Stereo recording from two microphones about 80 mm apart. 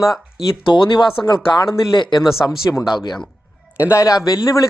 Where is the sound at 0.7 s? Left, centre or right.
Left.